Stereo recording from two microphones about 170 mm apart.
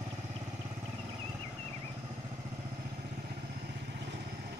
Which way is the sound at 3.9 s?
75° right (ahead or behind).